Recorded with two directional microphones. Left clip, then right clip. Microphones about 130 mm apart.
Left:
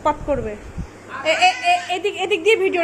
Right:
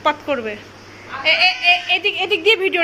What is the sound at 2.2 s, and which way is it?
Speech, 15° left (ahead or behind).